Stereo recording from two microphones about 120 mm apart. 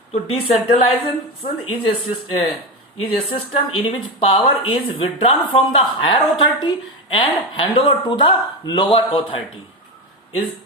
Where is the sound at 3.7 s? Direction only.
50° left (ahead or behind).